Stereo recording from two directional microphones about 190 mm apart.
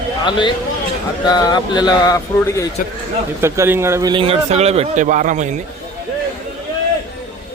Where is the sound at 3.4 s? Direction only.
15° right (ahead or behind).